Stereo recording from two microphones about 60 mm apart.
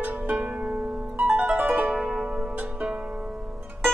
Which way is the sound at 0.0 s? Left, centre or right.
Right.